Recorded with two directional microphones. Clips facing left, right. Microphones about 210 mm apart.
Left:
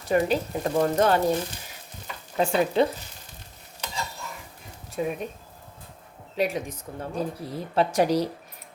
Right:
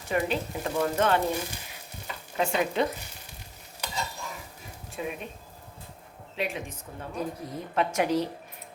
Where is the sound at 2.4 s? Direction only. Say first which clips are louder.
Left 4 dB; 35° left (ahead or behind).